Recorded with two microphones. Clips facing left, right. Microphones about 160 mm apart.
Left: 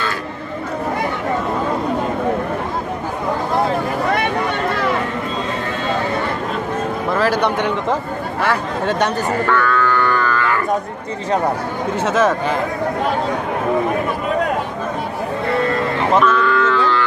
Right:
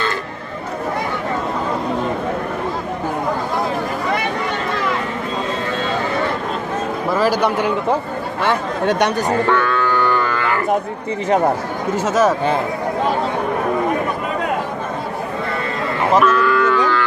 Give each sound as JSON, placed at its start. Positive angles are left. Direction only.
{"t": 7.4, "sound": "speech", "side_deg": -5}
{"t": 8.4, "sound": "speech", "side_deg": -20}
{"t": 12.0, "sound": "speech", "side_deg": -5}
{"t": 16.2, "sound": "cattle", "side_deg": -5}